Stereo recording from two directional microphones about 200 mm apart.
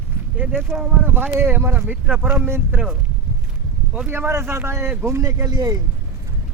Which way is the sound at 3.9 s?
10° right (ahead or behind).